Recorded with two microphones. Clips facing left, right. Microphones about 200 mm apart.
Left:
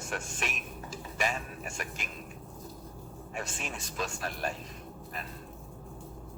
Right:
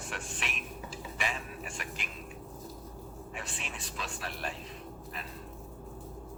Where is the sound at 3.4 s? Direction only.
45° left (ahead or behind).